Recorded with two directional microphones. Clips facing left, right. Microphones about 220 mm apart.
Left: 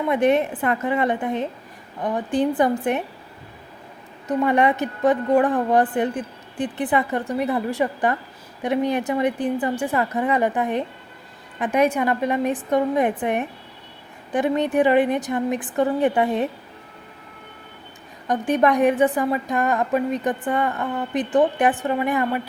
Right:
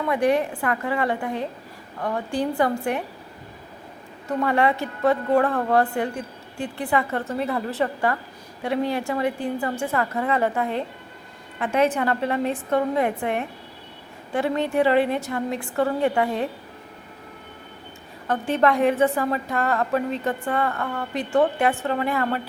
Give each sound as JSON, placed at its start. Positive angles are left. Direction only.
{"t": 0.0, "sound": "a woman's voice", "side_deg": 20}
{"t": 4.3, "sound": "a woman's voice", "side_deg": 20}
{"t": 18.3, "sound": "a woman's voice", "side_deg": 15}